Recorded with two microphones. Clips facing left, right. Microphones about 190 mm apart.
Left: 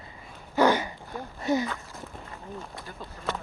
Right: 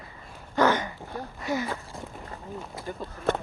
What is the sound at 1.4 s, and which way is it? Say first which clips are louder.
Speech: left 4 dB; 20° left (ahead or behind).